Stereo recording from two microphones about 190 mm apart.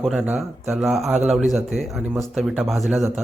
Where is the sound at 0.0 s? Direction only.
5° right (ahead or behind).